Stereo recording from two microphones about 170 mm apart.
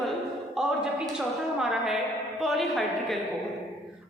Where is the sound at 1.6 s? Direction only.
Centre (ahead or behind).